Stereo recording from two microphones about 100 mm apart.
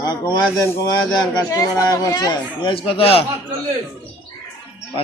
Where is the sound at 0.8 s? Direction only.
35° left (ahead or behind); by 3.3 s 75° left (ahead or behind).